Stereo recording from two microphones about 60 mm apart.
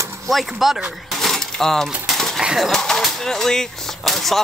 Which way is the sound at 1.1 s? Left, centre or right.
Centre.